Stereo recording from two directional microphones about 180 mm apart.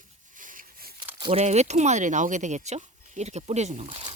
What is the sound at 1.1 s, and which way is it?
Speech, 30° right (ahead or behind).